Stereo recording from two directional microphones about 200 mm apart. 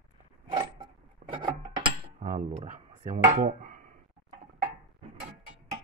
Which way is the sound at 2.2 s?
40° right (ahead or behind).